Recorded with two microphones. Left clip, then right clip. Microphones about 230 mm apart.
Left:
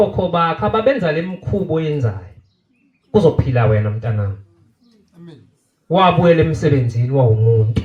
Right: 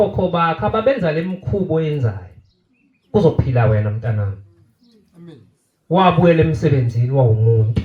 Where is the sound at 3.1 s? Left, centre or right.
Left.